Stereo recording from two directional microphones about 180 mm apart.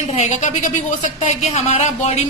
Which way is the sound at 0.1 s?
40° left (ahead or behind).